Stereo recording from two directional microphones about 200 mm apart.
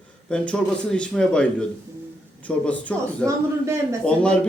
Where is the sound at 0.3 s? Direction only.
5° left (ahead or behind).